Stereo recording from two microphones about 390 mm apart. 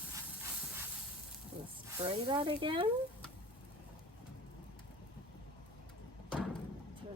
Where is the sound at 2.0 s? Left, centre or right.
Centre.